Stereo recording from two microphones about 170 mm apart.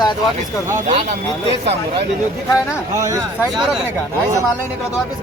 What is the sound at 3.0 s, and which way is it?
Speech, 20° right (ahead or behind).